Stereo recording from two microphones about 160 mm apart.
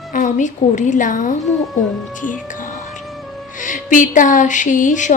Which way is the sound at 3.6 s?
55° left (ahead or behind).